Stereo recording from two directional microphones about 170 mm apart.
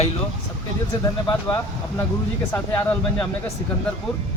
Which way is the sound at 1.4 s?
15° left (ahead or behind).